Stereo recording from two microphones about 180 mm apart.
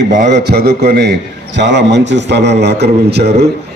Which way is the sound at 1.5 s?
75° right (ahead or behind).